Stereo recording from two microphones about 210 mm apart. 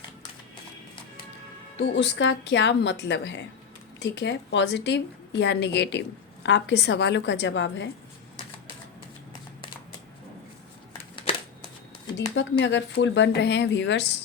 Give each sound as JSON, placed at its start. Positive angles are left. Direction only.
{"t": 1.7, "sound": "speech", "side_deg": 60}
{"t": 12.3, "sound": "speech", "side_deg": 60}